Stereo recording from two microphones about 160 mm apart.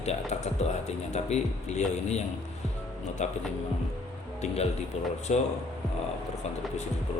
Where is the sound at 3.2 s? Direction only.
45° left (ahead or behind).